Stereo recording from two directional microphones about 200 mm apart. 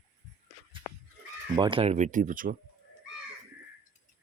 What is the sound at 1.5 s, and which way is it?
Speech, 25° right (ahead or behind).